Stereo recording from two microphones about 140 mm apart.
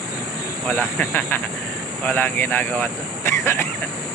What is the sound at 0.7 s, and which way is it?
Speech, 15° left (ahead or behind).